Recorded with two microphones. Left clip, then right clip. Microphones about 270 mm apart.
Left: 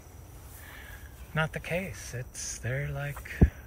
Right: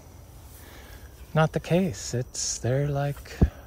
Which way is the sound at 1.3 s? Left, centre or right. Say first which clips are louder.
Right 7 dB; centre.